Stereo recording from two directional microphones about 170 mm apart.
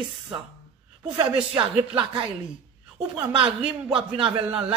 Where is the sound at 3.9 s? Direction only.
30° right (ahead or behind).